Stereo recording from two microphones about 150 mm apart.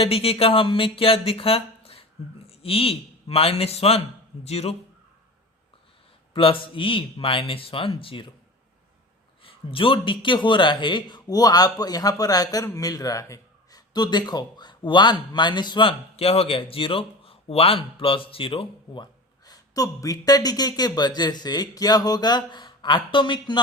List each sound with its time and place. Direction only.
0.0 s speech: 40° left (ahead or behind)
6.3 s speech: 35° left (ahead or behind)
9.4 s speech: 35° left (ahead or behind)
19.5 s speech: 25° left (ahead or behind)